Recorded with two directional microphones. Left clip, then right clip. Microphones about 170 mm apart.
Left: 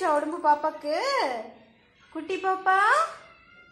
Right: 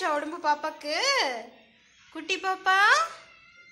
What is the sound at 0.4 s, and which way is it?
Speech, 30° right (ahead or behind).